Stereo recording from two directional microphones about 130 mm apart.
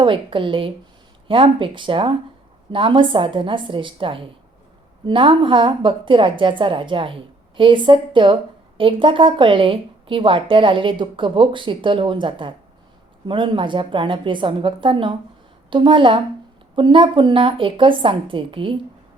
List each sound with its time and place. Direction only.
0.0 s a woman's voice: 40° right (ahead or behind)